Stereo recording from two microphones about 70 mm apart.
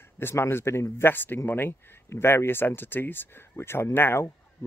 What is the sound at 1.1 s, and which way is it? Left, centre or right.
Speech, left.